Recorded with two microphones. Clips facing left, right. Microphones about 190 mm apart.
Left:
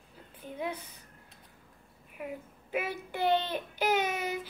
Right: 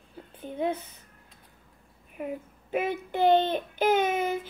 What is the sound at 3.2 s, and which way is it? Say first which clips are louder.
Speech: right 7 dB; 55° right (ahead or behind).